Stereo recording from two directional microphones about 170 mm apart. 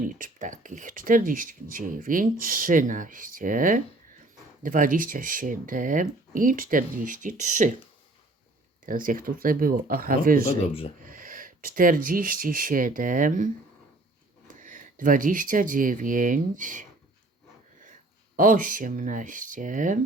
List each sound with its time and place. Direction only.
0.1 s speech: 50° right (ahead or behind)
8.9 s speech: 55° right (ahead or behind)
18.3 s speech: 50° right (ahead or behind)